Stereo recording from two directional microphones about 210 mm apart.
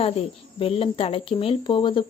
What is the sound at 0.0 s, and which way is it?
Speech, 30° left (ahead or behind).